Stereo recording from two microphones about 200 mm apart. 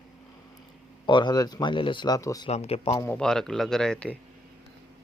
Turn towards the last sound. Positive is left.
turn(degrees=5)  # may be behind; listen again after turning